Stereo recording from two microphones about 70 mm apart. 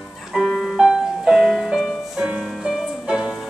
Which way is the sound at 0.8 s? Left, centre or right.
Centre.